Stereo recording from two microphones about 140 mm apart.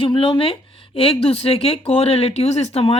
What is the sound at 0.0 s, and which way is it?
A woman's voice, 40° left (ahead or behind).